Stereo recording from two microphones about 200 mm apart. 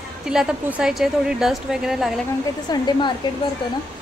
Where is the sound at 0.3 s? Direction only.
5° right (ahead or behind).